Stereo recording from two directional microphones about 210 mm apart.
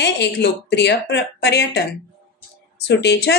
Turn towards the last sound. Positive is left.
turn(degrees=50)  # may be behind; listen again after turning